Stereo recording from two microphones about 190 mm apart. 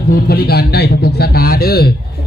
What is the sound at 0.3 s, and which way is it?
Speech, 55° left (ahead or behind).